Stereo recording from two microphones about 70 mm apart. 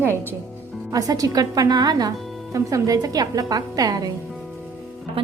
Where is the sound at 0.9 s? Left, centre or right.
Right.